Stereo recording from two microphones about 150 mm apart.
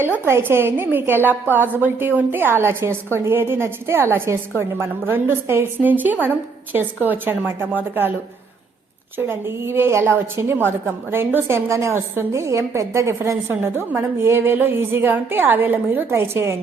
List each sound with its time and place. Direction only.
0.0 s a woman's voice: 15° right (ahead or behind)
9.1 s a woman's voice: 15° right (ahead or behind)